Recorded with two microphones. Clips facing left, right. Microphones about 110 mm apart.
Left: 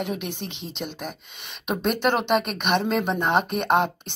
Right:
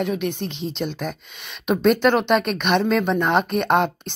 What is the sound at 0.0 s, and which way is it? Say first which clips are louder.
Speech: right 6 dB; 15° left (ahead or behind).